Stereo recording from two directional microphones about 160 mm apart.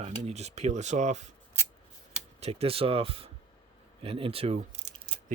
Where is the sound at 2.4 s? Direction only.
40° right (ahead or behind).